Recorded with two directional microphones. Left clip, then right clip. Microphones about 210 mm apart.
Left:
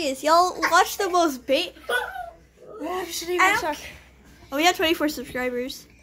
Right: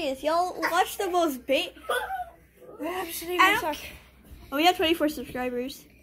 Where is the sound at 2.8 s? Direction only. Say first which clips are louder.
Left 3 dB; 10° left (ahead or behind).